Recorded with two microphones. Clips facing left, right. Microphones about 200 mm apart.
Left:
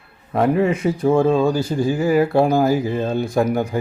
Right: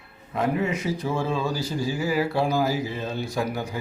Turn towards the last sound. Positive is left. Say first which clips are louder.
# left 9 dB
turn(degrees=55)  # may be behind; listen again after turning